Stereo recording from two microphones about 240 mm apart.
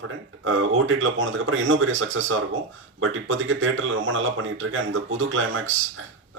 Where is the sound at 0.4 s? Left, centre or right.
Right.